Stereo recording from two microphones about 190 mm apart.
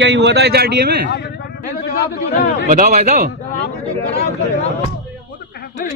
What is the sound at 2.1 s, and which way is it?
Speech, 55° left (ahead or behind).